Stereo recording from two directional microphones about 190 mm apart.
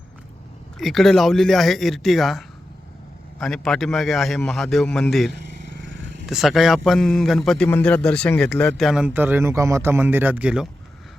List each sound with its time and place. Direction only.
0.8 s a man's voice: centre (ahead or behind)
3.4 s a man's voice: centre (ahead or behind)
5.8 s a sound: 75° right (ahead or behind)
6.2 s a man's voice: centre (ahead or behind)